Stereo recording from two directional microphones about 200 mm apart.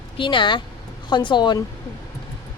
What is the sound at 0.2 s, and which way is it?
Speech, 25° left (ahead or behind).